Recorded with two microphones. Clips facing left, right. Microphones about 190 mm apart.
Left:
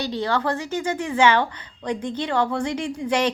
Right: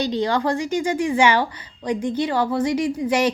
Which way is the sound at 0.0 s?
20° right (ahead or behind).